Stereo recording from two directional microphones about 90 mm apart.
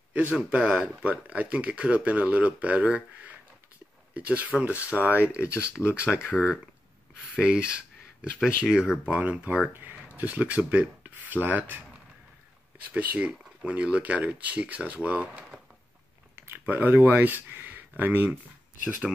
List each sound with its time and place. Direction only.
0.1 s speech: 15° right (ahead or behind)
6.1 s speech: 5° left (ahead or behind)
7.3 s speech: 10° right (ahead or behind)
12.9 s speech: 15° right (ahead or behind)